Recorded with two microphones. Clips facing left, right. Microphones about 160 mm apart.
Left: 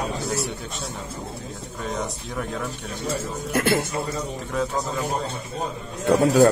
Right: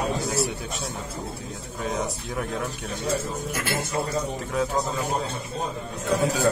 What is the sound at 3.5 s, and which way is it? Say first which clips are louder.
Speech: left 11 dB; 60° left (ahead or behind).